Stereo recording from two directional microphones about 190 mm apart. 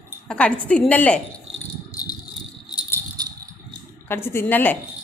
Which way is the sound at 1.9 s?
20° left (ahead or behind).